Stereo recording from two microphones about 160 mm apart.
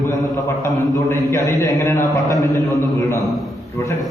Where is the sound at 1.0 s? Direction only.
15° left (ahead or behind).